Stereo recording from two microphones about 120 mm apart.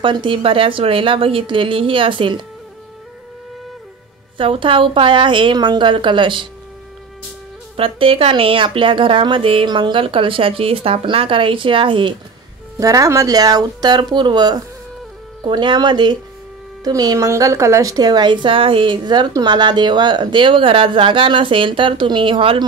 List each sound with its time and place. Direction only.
0.0 s a woman's voice: 45° right (ahead or behind)
4.4 s a woman's voice: 45° right (ahead or behind)
7.7 s a woman's voice: 50° right (ahead or behind)
12.7 s speech: 25° right (ahead or behind); by 22.7 s 45° right (ahead or behind)